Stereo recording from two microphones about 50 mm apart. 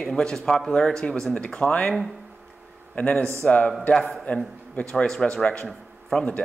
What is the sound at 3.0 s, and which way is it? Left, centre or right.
Speech, left.